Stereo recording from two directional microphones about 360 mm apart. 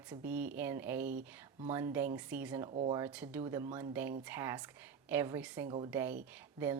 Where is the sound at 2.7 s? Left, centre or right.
Centre.